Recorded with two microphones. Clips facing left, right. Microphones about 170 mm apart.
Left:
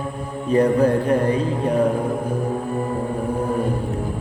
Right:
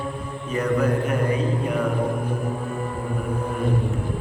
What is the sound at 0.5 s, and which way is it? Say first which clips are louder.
Music: left 6 dB; 30° left (ahead or behind).